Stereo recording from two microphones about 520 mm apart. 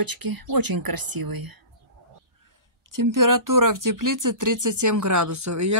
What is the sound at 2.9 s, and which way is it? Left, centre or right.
Speech, right.